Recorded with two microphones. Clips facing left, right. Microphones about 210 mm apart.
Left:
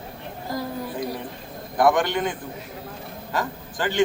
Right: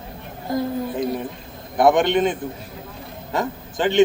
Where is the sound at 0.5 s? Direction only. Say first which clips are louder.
Right 6 dB; 25° right (ahead or behind).